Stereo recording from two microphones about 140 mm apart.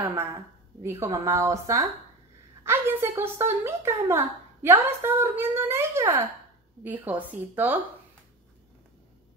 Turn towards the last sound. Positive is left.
turn(degrees=-15)  # may be behind; listen again after turning